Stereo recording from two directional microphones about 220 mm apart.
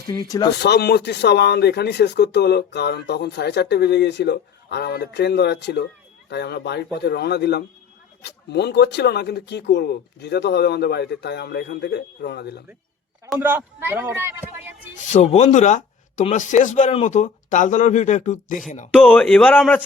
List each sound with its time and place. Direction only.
0.2 s a man's voice: 15° left (ahead or behind)
0.6 s speech: 50° left (ahead or behind)
13.3 s a man's voice: 10° right (ahead or behind)
15.1 s speech: 30° left (ahead or behind)
18.9 s a man's voice: 5° left (ahead or behind)